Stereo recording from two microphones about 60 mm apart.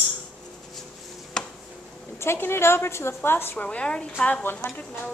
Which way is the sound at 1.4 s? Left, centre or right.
Centre.